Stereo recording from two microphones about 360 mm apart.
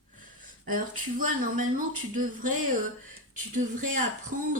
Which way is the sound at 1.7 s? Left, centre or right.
Right.